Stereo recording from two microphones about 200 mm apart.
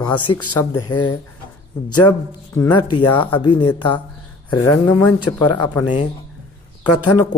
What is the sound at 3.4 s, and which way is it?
Speech, 25° left (ahead or behind).